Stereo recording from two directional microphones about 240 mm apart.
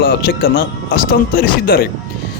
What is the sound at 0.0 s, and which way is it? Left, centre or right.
A man's voice, left.